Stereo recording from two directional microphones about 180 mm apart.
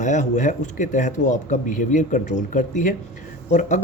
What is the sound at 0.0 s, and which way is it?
Speech, 40° left (ahead or behind).